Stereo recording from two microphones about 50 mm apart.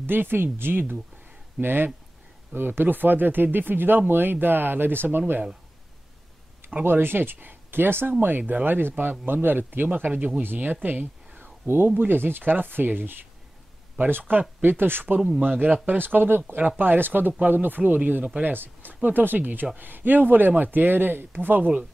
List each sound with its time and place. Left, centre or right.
0.0 s speech: right
6.8 s speech: right
15.4 s speech: right
16.0 s speech: right
16.6 s speech: right
18.5 s speech: right